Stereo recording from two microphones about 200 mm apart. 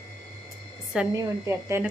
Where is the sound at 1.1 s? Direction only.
15° right (ahead or behind).